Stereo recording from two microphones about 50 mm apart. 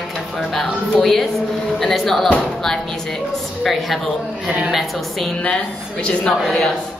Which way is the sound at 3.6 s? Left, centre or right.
Centre.